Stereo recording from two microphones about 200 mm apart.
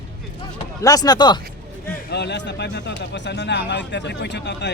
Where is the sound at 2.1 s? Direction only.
60° left (ahead or behind).